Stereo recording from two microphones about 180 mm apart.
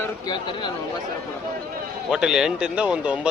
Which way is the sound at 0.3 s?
25° left (ahead or behind).